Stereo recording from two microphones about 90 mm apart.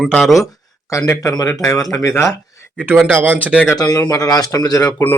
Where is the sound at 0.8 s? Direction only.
35° left (ahead or behind).